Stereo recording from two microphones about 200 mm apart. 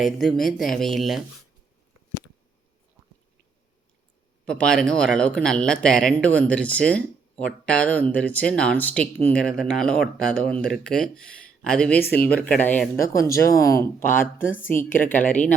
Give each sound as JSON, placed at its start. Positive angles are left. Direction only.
{"t": 0.0, "sound": "speech", "side_deg": 0}
{"t": 4.4, "sound": "speech", "side_deg": 5}
{"t": 14.8, "sound": "speech", "side_deg": 45}
{"t": 15.3, "sound": "speech", "side_deg": 10}